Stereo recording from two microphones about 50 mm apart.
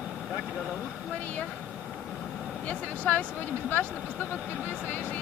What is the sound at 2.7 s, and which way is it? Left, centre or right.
Speech, left.